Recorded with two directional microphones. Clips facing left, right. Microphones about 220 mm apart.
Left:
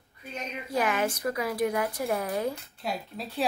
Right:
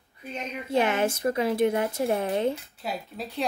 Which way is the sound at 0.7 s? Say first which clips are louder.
Right 4 dB; 25° right (ahead or behind).